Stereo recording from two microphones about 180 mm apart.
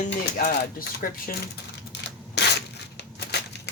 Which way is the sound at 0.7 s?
50° left (ahead or behind).